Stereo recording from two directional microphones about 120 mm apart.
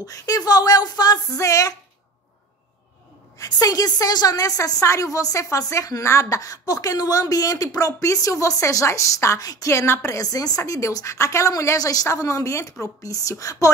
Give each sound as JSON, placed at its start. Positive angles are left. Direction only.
{"t": 0.0, "sound": "speech", "side_deg": 30}
{"t": 3.3, "sound": "a woman's voice", "side_deg": 30}